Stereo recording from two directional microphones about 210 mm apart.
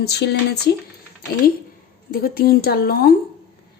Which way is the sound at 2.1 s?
45° left (ahead or behind).